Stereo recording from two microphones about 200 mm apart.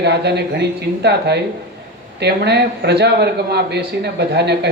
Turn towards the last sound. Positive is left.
turn(degrees=-55)  # may be behind; listen again after turning